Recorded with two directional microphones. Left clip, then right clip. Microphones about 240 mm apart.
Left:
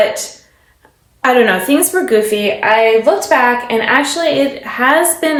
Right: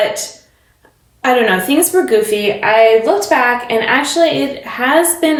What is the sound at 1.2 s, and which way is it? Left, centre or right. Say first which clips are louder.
A woman's voice: left 1 dB; centre.